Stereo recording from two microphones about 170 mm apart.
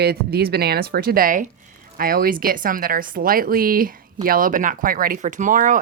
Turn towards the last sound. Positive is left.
turn(degrees=-50)  # may be behind; listen again after turning